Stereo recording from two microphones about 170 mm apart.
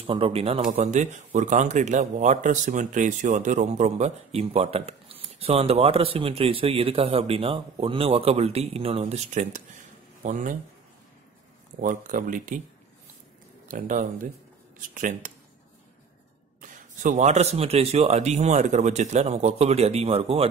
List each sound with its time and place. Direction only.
0.0 s speech: 35° right (ahead or behind)
0.7 s speech: 45° right (ahead or behind)
11.8 s speech: 50° right (ahead or behind)
13.7 s speech: 50° right (ahead or behind)
16.6 s speech: 50° right (ahead or behind)